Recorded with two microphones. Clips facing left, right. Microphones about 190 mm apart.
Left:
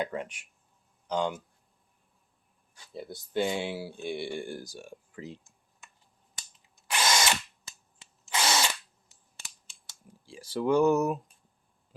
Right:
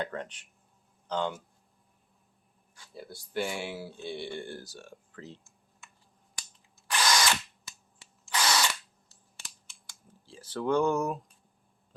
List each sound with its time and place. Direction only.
0.0 s speech: 10° left (ahead or behind)
2.7 s speech: 20° left (ahead or behind)
7.0 s drill: 25° left (ahead or behind)
10.1 s speech: 10° left (ahead or behind)